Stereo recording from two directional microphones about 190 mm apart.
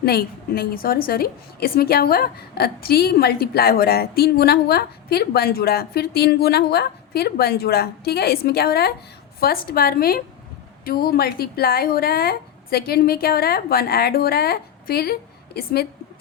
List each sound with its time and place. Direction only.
0.0 s a woman's voice: 55° left (ahead or behind)